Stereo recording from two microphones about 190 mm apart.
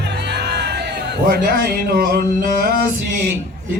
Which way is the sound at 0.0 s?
60° right (ahead or behind).